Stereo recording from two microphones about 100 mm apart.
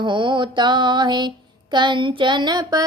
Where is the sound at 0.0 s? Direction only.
55° right (ahead or behind).